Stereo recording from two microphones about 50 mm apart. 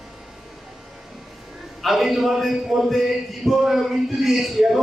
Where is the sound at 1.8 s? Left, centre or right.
Centre.